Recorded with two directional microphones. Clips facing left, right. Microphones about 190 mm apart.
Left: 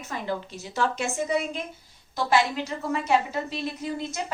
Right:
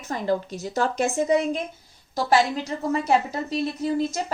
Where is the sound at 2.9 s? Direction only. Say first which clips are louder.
Right 2 dB; 40° right (ahead or behind).